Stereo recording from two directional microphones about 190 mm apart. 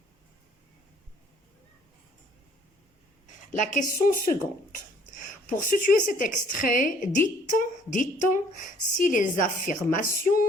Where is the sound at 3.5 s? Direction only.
40° left (ahead or behind).